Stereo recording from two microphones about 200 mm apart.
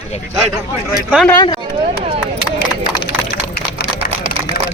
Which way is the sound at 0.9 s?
Centre (ahead or behind).